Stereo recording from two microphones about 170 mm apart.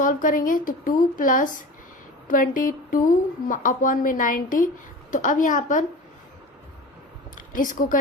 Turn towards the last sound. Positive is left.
turn(degrees=50)  # may be behind; listen again after turning